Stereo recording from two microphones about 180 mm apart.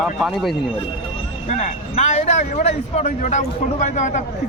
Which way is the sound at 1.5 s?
40° left (ahead or behind).